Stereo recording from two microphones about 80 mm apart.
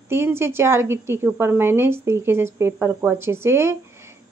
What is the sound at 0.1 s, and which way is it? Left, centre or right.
A woman's voice, right.